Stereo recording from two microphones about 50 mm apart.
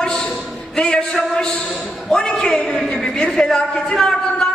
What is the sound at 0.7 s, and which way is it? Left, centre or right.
A man's voice, centre.